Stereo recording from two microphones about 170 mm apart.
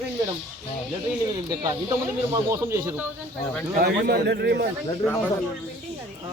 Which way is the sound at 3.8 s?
70° right (ahead or behind).